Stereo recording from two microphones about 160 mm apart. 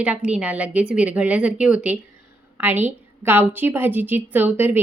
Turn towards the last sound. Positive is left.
turn(degrees=-10)  # may be behind; listen again after turning